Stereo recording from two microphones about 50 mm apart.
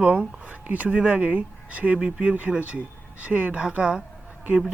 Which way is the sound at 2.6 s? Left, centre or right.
Right.